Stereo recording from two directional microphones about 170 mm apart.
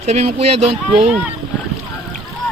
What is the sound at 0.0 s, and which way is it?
Speech, 40° right (ahead or behind).